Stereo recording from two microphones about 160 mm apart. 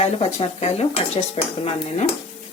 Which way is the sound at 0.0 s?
40° left (ahead or behind).